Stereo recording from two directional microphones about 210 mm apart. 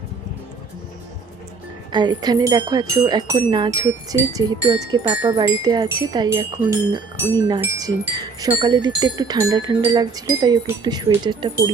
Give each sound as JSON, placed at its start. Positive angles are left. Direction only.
{"t": 1.9, "sound": "wind chime", "side_deg": -20}